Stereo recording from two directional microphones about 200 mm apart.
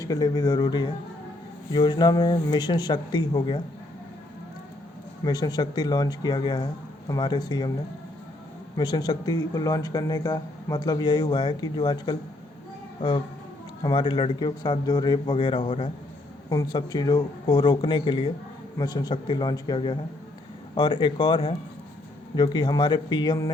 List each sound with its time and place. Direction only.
0.0 s speech: 20° left (ahead or behind)
5.2 s speech: 20° left (ahead or behind)
8.7 s speech: 20° left (ahead or behind)